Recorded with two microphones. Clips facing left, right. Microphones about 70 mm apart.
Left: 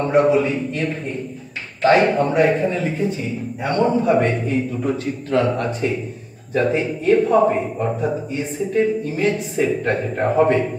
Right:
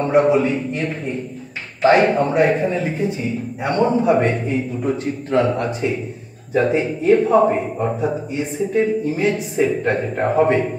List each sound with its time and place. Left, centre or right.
0.0 s a man's voice: right
0.4 s a man's voice: centre